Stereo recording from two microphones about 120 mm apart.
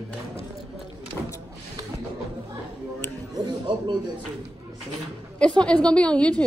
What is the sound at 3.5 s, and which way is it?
Music, 35° right (ahead or behind).